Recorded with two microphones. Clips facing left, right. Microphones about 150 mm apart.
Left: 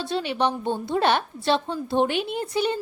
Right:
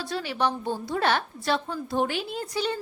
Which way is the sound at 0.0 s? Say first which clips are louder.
Left 3 dB; 25° left (ahead or behind).